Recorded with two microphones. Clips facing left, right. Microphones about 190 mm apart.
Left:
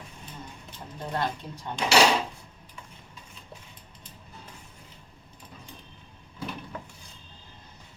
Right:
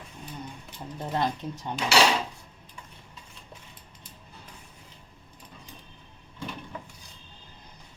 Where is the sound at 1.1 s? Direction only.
20° right (ahead or behind).